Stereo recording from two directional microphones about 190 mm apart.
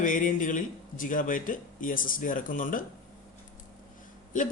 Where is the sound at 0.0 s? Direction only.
45° left (ahead or behind).